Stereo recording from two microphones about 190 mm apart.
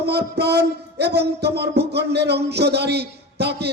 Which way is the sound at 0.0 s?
60° right (ahead or behind).